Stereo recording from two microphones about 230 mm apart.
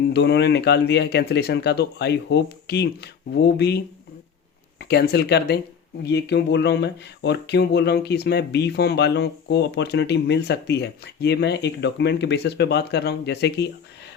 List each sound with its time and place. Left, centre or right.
0.1 s speech: left
4.8 s speech: left